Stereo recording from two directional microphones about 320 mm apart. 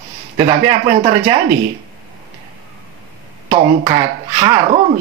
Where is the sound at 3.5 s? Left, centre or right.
Centre.